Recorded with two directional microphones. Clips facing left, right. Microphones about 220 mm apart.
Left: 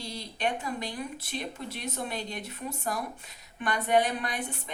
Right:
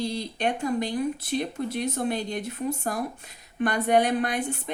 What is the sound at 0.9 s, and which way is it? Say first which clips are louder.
Speech: right 9 dB; 45° right (ahead or behind).